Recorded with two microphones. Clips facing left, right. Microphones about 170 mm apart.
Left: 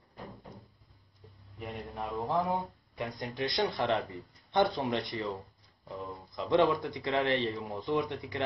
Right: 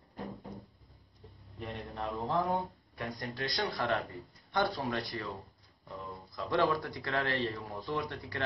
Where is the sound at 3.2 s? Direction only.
20° left (ahead or behind).